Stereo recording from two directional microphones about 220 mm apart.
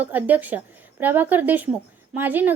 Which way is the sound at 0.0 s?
10° right (ahead or behind).